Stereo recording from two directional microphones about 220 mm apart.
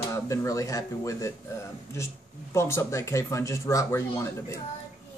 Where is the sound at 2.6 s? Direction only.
10° left (ahead or behind).